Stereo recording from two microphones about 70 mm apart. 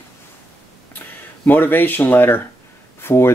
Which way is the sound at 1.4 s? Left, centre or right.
Left.